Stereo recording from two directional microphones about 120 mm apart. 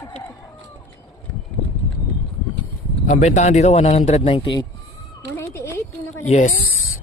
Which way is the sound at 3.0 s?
75° left (ahead or behind).